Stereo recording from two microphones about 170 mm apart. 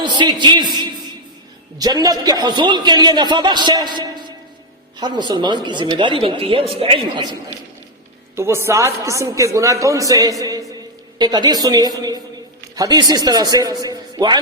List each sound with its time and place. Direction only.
0.0 s a man's voice: 25° right (ahead or behind)
8.4 s a woman's voice: 15° right (ahead or behind)